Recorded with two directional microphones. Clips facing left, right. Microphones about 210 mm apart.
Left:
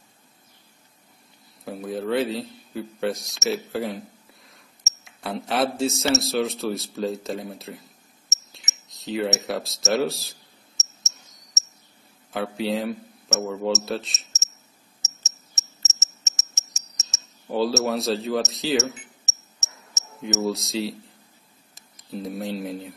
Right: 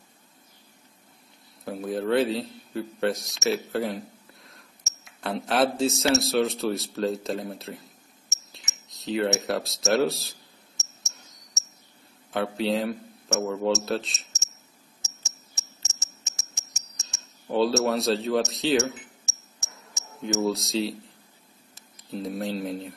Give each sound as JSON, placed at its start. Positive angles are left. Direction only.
{"t": 1.6, "sound": "speech", "side_deg": 0}
{"t": 3.4, "sound": "a sound", "side_deg": 0}
{"t": 5.0, "sound": "speech", "side_deg": 0}
{"t": 10.8, "sound": "cricket", "side_deg": 20}
{"t": 12.3, "sound": "speech", "side_deg": 0}
{"t": 15.0, "sound": "cricket", "side_deg": 25}
{"t": 17.5, "sound": "speech", "side_deg": 0}
{"t": 19.2, "sound": "a sound", "side_deg": 25}
{"t": 20.2, "sound": "speech", "side_deg": 5}
{"t": 22.1, "sound": "speech", "side_deg": 0}